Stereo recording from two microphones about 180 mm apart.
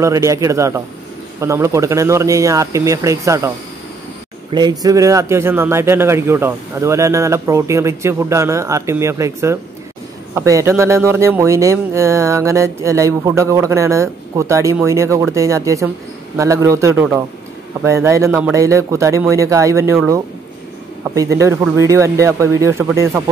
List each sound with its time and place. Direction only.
0.0 s speech: 15° right (ahead or behind)